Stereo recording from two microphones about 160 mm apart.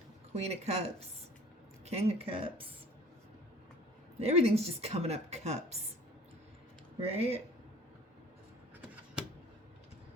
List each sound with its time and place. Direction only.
0.4 s a woman's voice: 40° right (ahead or behind)
4.2 s a woman's voice: 40° right (ahead or behind)
7.0 s a woman's voice: 40° right (ahead or behind)